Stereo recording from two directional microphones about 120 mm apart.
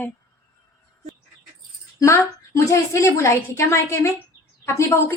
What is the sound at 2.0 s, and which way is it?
A woman's voice, 25° left (ahead or behind).